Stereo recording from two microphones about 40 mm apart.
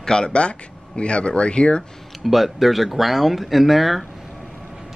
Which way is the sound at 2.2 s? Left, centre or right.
Centre.